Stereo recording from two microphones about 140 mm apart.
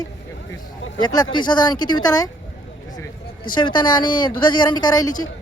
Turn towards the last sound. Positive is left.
turn(degrees=30)  # may be behind; listen again after turning